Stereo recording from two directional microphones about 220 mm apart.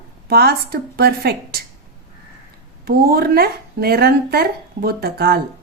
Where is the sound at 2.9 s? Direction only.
45° right (ahead or behind).